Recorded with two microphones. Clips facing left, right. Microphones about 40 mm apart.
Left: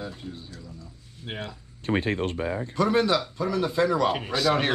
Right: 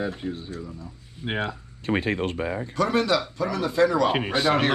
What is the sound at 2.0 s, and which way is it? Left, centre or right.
Speech, right.